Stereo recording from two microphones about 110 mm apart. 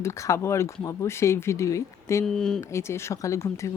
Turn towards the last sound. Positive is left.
turn(degrees=25)  # may be behind; listen again after turning